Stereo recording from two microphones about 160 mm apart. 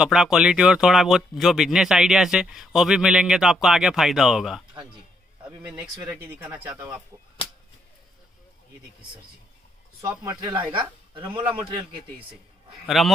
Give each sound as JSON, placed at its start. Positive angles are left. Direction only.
{"t": 0.0, "sound": "speech", "side_deg": -5}
{"t": 5.7, "sound": "speech", "side_deg": -10}
{"t": 10.0, "sound": "speech", "side_deg": -20}
{"t": 12.8, "sound": "a man's voice", "side_deg": 0}